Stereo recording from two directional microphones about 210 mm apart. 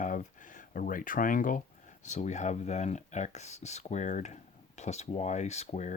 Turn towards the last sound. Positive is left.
turn(degrees=35)  # may be behind; listen again after turning